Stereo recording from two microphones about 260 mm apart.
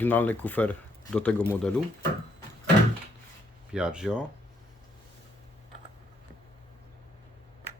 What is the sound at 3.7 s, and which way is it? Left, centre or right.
Speech, centre.